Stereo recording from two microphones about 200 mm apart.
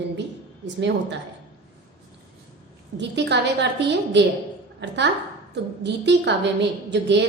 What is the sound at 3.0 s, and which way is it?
A woman's voice, 60° right (ahead or behind).